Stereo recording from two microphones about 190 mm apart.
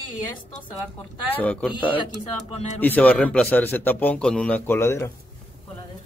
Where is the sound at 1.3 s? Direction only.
10° left (ahead or behind).